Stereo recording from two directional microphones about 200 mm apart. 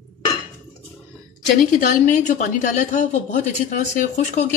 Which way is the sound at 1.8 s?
40° left (ahead or behind).